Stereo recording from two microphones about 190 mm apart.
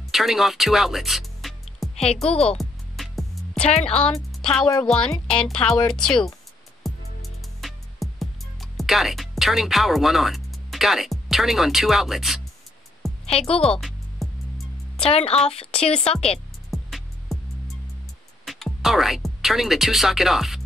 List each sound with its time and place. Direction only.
0.1 s music: centre (ahead or behind)
2.2 s a woman's voice: 30° left (ahead or behind)
2.5 s music: centre (ahead or behind)
3.6 s a woman's voice: 35° left (ahead or behind)
3.9 s speech: 5° left (ahead or behind)
6.8 s music: centre (ahead or behind)
13.2 s speech: 30° left (ahead or behind)
13.7 s music: centre (ahead or behind)
15.0 s a woman's voice: 30° left (ahead or behind)
16.7 s music: centre (ahead or behind)
18.4 s speech: centre (ahead or behind)